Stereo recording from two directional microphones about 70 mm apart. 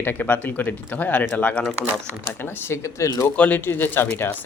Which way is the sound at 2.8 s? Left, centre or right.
Left.